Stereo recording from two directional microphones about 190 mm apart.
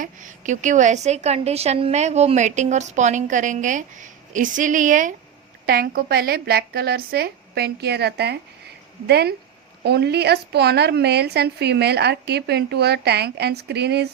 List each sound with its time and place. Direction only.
0.0 s a woman's voice: 40° right (ahead or behind); by 14.1 s 60° right (ahead or behind)